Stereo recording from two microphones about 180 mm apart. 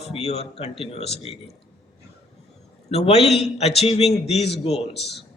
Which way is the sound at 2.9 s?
35° left (ahead or behind).